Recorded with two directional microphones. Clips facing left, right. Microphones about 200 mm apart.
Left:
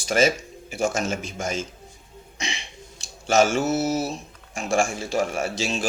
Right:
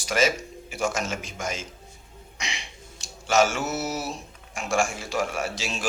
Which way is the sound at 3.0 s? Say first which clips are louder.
Left 2 dB; 30° left (ahead or behind).